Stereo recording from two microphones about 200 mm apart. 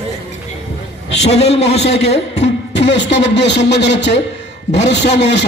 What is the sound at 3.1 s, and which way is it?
A man's voice, 60° left (ahead or behind).